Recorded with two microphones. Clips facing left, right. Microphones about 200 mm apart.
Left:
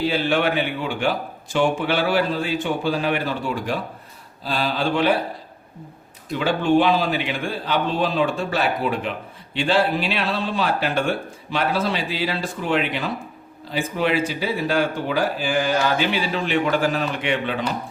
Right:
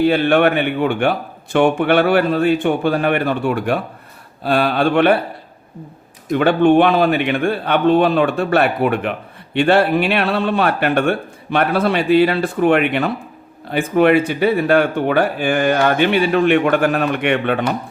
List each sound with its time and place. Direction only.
0.0 s a man's voice: 60° right (ahead or behind)
6.3 s a man's voice: 60° right (ahead or behind)